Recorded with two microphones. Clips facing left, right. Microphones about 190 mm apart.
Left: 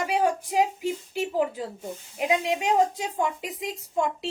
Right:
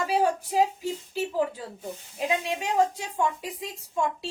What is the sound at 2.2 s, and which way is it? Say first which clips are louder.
A woman's voice: left 3 dB; 20° left (ahead or behind).